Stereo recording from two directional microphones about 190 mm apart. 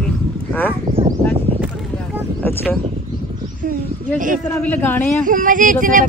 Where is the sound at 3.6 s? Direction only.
45° right (ahead or behind).